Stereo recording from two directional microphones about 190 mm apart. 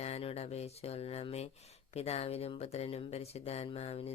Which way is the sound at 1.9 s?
35° left (ahead or behind).